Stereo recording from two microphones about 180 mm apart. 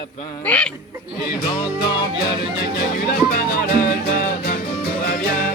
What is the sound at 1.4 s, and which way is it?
Music, 20° left (ahead or behind).